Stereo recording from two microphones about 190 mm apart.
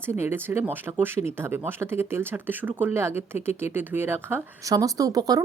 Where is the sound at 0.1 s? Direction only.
10° right (ahead or behind).